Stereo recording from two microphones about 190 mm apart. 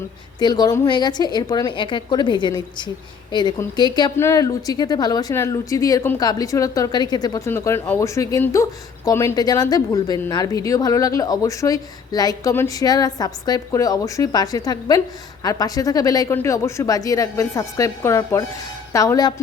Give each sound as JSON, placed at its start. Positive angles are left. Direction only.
{"t": 0.3, "sound": "a woman's voice", "side_deg": 20}